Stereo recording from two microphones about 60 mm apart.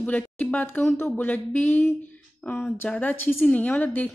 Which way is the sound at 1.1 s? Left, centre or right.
Left.